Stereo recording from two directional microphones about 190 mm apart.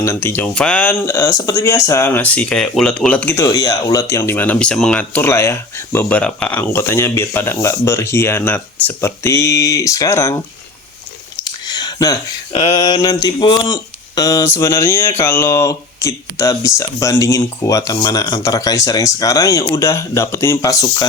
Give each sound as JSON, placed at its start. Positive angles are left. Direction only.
{"t": 0.0, "sound": "speech", "side_deg": 15}
{"t": 11.6, "sound": "a sound", "side_deg": 20}
{"t": 12.7, "sound": "mantra", "side_deg": 20}
{"t": 14.2, "sound": "speech", "side_deg": 20}